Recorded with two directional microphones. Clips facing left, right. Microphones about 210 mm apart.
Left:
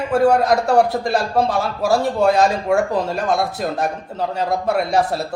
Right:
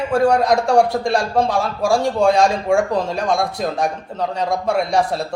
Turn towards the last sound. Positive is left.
turn(degrees=5)  # may be behind; listen again after turning